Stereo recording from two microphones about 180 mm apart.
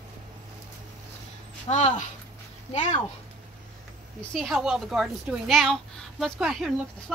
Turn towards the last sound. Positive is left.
turn(degrees=0)  # may be behind; listen again after turning